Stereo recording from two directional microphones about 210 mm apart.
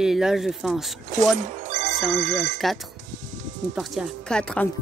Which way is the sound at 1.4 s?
35° right (ahead or behind).